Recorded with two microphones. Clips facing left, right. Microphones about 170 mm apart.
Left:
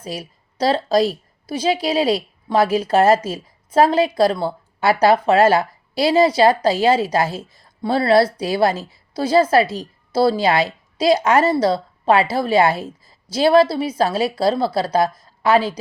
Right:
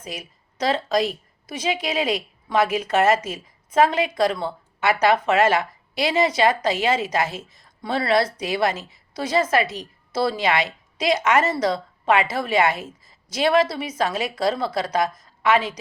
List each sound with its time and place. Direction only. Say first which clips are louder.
0.0 s a woman's voice: left 5 dB; 35° left (ahead or behind)